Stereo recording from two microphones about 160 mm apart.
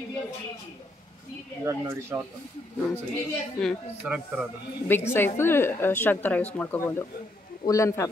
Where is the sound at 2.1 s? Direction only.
10° right (ahead or behind).